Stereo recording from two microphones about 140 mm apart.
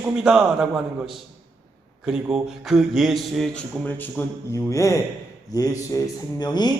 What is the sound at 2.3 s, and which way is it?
A man's voice, centre (ahead or behind).